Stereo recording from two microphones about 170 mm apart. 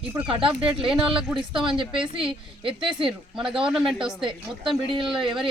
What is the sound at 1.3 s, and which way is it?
Speech, 5° right (ahead or behind).